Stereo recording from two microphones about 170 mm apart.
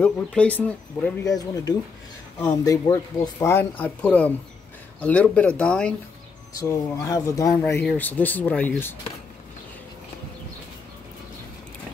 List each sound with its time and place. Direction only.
0.0 s speech: 5° left (ahead or behind)
1.4 s speech: 20° left (ahead or behind); by 5.9 s 5° left (ahead or behind)
6.6 s speech: 15° left (ahead or behind)